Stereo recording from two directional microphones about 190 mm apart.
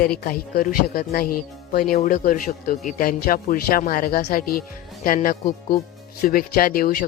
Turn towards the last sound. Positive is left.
turn(degrees=50)  # may be behind; listen again after turning